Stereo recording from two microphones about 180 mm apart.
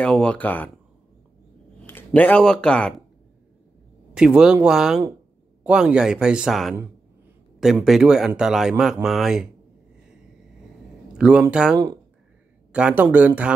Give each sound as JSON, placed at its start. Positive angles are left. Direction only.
{"t": 0.0, "sound": "speech", "side_deg": 5}
{"t": 1.9, "sound": "speech", "side_deg": 10}
{"t": 4.1, "sound": "speech", "side_deg": -5}
{"t": 11.1, "sound": "speech", "side_deg": -5}
{"t": 11.7, "sound": "speech", "side_deg": -20}
{"t": 12.7, "sound": "speech", "side_deg": -5}